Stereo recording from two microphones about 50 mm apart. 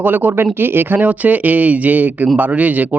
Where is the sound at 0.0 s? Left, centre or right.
Right.